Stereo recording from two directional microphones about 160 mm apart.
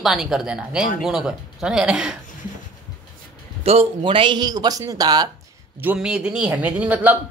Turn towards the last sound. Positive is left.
turn(degrees=-10)  # may be behind; listen again after turning